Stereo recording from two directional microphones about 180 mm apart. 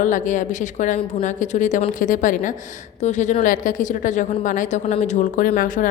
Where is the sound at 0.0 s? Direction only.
45° left (ahead or behind).